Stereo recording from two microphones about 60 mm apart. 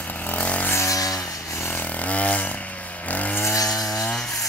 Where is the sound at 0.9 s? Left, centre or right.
Left.